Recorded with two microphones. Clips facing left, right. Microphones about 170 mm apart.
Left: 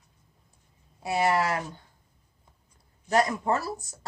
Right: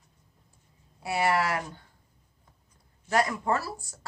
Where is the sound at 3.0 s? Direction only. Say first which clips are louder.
Left 2 dB; 20° left (ahead or behind).